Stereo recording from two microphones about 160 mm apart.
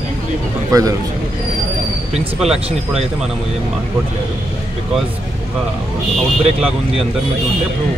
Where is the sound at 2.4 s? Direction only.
5° right (ahead or behind).